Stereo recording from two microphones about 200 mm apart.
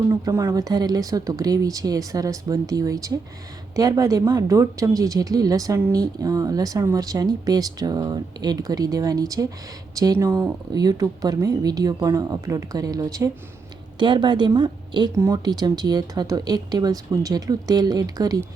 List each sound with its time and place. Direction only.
0.1 s speech: 15° right (ahead or behind)